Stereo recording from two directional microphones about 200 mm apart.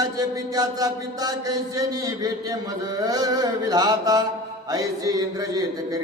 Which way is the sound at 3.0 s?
20° right (ahead or behind).